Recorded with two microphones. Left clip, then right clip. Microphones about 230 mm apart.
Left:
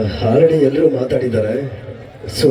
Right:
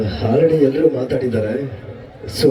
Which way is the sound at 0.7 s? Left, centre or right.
Centre.